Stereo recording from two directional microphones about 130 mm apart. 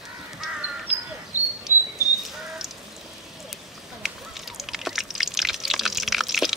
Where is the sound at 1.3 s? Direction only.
25° left (ahead or behind).